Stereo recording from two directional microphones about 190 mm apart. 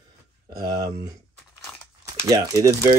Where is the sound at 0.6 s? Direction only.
20° right (ahead or behind).